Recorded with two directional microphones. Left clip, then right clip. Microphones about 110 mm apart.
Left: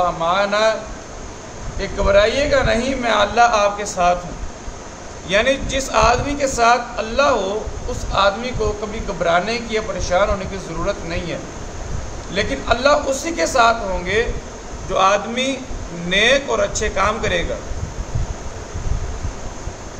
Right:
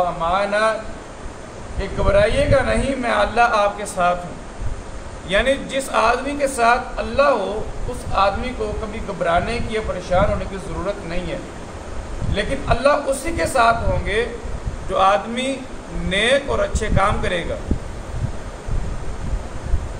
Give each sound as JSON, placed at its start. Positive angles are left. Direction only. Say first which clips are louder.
{"t": 0.2, "sound": "speech", "louder": "left 1 dB", "side_deg": 45}
{"t": 1.8, "sound": "speech", "louder": "left 2 dB", "side_deg": 40}
{"t": 5.3, "sound": "a man's voice", "louder": "left 1 dB", "side_deg": 30}
{"t": 12.4, "sound": "a man's voice", "louder": "left 2 dB", "side_deg": 40}